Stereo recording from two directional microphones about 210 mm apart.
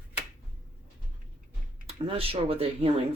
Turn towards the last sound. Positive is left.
turn(degrees=-25)  # may be behind; listen again after turning